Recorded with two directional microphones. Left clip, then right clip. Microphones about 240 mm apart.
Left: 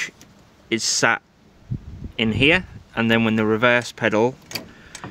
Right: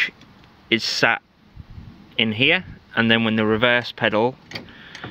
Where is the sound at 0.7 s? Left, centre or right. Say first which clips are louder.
Right 1 dB; centre.